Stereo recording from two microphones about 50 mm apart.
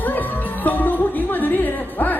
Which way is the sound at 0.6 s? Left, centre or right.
Left.